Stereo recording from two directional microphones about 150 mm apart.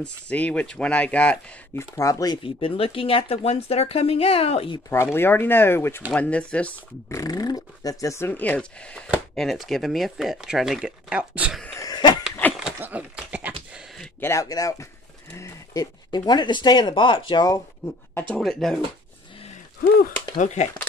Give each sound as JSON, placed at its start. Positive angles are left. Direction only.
{"t": 0.0, "sound": "speech", "side_deg": 10}
{"t": 2.0, "sound": "speech", "side_deg": 20}
{"t": 2.4, "sound": "speech", "side_deg": 35}
{"t": 4.8, "sound": "speech", "side_deg": 15}
{"t": 7.1, "sound": "speech", "side_deg": 25}
{"t": 11.6, "sound": "a sound", "side_deg": 20}
{"t": 12.6, "sound": "a sound", "side_deg": -10}
{"t": 14.2, "sound": "speech", "side_deg": 20}
{"t": 18.3, "sound": "speech", "side_deg": 0}
{"t": 20.3, "sound": "speech", "side_deg": 50}